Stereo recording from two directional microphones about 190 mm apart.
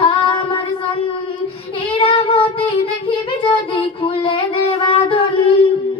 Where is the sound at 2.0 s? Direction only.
25° left (ahead or behind).